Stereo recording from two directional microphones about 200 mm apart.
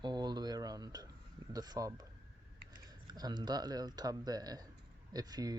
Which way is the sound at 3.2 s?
20° right (ahead or behind).